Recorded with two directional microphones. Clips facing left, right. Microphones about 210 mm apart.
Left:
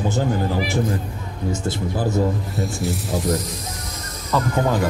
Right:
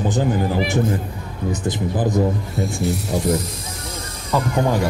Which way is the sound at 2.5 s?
Centre (ahead or behind).